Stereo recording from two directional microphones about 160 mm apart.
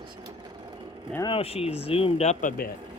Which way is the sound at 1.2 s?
35° left (ahead or behind).